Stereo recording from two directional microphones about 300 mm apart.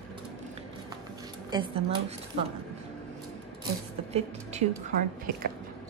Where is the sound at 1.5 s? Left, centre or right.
Centre.